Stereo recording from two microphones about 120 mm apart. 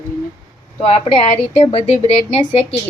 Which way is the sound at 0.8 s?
55° left (ahead or behind).